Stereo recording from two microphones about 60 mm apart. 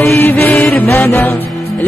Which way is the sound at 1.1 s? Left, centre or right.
Left.